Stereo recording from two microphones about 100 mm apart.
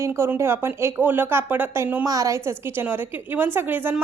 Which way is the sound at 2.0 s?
35° right (ahead or behind).